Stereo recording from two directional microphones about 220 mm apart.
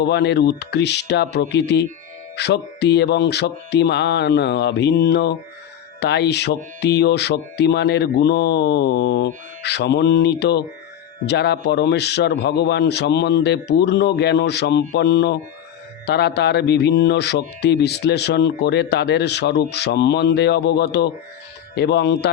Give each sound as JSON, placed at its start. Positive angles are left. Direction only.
{"t": 0.0, "sound": "speech", "side_deg": 50}